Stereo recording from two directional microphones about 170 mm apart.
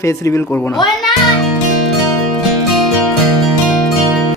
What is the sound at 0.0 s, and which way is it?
Speech, 15° left (ahead or behind).